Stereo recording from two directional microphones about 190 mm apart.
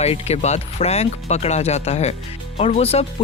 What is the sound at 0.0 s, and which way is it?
Speech, 35° left (ahead or behind).